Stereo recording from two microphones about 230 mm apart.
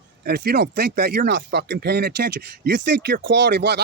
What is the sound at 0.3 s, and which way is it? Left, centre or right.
Speech, right.